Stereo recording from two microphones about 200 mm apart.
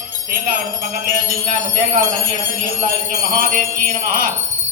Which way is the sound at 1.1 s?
45° right (ahead or behind).